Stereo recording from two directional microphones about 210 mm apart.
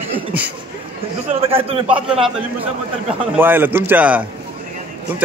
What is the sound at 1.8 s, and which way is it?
Speech, 5° right (ahead or behind).